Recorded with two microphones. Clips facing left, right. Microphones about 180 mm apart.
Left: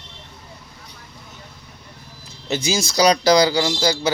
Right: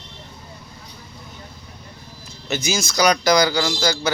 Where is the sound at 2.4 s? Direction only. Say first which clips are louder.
Left 2 dB; 30° left (ahead or behind).